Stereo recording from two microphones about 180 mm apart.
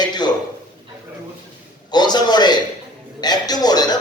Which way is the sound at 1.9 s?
25° left (ahead or behind).